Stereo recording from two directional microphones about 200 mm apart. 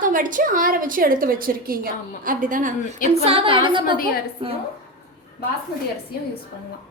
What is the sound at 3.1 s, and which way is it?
Speech, 30° right (ahead or behind).